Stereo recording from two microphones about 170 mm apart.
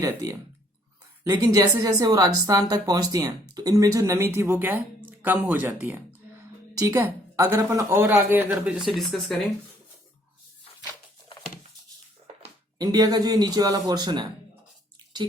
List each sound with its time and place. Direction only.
0.0 s a woman's voice: 20° right (ahead or behind); by 9.3 s centre (ahead or behind)
12.8 s a woman's voice: 25° right (ahead or behind)
14.9 s a sound: 25° right (ahead or behind)